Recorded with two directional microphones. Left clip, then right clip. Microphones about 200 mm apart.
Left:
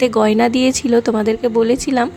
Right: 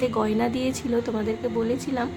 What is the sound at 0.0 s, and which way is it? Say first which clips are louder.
A woman's voice: left 10 dB; 45° left (ahead or behind).